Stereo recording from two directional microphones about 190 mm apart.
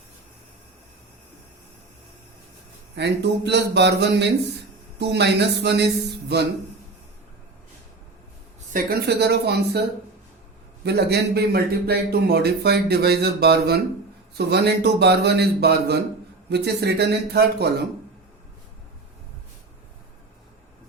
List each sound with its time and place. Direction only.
2.9 s speech: 65° right (ahead or behind)
8.7 s speech: 55° right (ahead or behind)
10.8 s speech: 60° right (ahead or behind)